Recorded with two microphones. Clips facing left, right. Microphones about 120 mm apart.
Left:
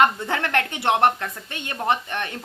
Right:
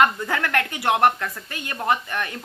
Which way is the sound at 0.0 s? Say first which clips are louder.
Even; 25° left (ahead or behind).